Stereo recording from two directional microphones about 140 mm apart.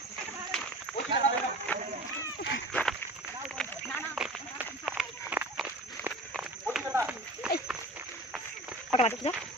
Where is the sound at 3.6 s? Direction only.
Centre (ahead or behind).